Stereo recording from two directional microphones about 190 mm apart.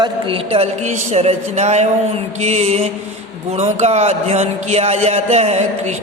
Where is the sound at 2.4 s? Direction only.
35° right (ahead or behind).